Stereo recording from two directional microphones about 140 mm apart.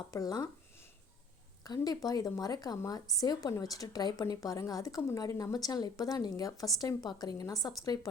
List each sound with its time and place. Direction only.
0.1 s speech: 25° left (ahead or behind)
1.6 s speech: 30° left (ahead or behind)